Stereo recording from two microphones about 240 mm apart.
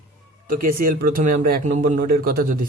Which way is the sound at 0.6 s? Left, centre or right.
Right.